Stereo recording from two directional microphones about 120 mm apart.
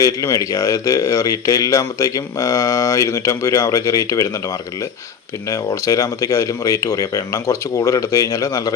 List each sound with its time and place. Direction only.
0.0 s speech: 30° left (ahead or behind)
5.5 s speech: 30° left (ahead or behind)